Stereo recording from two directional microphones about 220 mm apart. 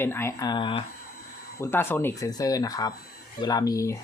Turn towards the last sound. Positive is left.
turn(degrees=15)  # may be behind; listen again after turning